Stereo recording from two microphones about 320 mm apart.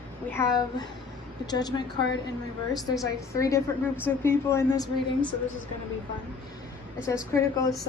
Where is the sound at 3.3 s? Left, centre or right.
Centre.